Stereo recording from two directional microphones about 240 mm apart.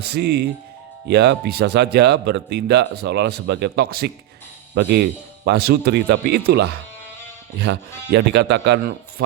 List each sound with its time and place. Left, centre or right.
0.0 s speech: right